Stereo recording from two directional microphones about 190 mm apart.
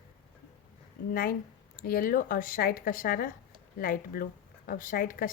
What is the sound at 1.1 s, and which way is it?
Speech, 50° left (ahead or behind).